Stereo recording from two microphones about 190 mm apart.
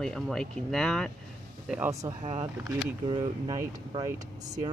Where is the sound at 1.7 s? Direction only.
15° right (ahead or behind).